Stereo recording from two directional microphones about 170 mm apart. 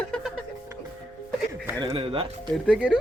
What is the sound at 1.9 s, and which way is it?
Speech, 30° right (ahead or behind).